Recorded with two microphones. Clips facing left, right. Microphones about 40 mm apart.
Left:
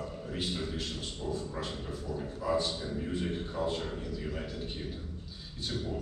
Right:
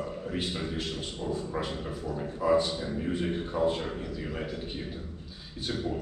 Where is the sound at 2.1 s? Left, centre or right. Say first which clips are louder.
Right 6 dB; right.